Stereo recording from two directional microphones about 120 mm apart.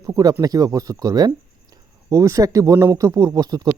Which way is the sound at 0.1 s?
30° right (ahead or behind).